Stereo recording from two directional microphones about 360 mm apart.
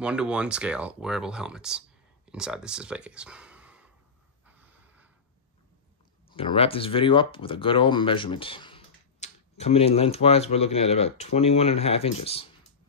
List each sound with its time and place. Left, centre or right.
0.0 s speech: centre
4.5 s snort: centre
6.2 s speech: centre